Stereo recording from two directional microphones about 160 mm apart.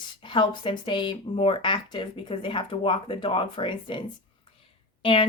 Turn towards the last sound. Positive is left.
turn(degrees=30)  # may be behind; listen again after turning